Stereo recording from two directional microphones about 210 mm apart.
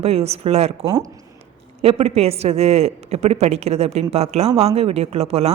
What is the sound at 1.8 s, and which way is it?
A woman's voice, 30° right (ahead or behind).